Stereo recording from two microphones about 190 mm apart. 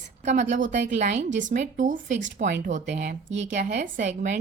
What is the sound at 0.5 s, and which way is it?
A woman's voice, 40° right (ahead or behind).